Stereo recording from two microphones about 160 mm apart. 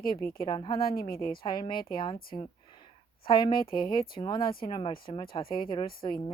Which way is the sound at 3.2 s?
30° left (ahead or behind).